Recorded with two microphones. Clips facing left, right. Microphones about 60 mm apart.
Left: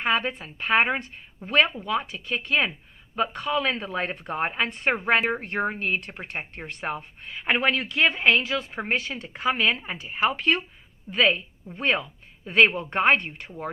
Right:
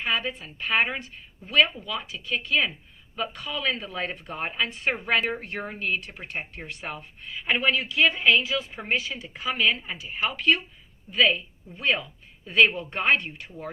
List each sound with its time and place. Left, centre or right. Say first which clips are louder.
0.0 s speech: left 3 dB; left